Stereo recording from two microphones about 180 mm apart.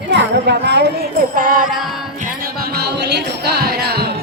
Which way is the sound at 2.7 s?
65° right (ahead or behind).